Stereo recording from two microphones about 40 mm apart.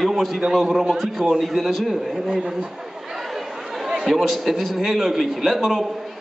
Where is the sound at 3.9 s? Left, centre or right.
Centre.